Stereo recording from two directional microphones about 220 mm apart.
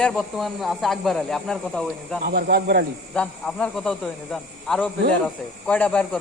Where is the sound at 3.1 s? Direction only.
5° left (ahead or behind).